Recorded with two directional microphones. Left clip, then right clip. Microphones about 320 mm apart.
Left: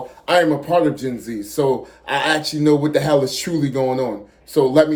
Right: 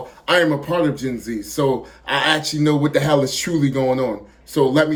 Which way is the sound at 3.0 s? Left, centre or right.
Left.